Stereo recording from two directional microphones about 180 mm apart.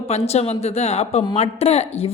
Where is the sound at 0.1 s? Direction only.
35° left (ahead or behind).